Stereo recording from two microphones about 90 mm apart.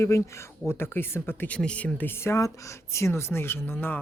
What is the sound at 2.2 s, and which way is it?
Speech, 35° left (ahead or behind).